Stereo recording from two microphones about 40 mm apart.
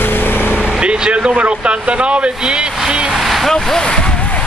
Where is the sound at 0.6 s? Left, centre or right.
Right.